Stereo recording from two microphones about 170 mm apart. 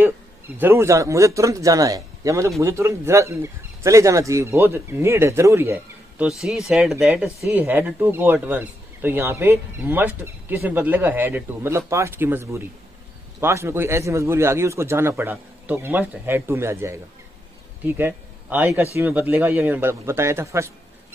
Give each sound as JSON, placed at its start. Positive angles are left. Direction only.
{"t": 0.6, "sound": "speech", "side_deg": -15}
{"t": 7.4, "sound": "speech", "side_deg": -15}